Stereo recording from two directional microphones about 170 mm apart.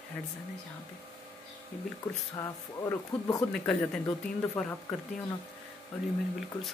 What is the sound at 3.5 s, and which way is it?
Speech, 5° left (ahead or behind).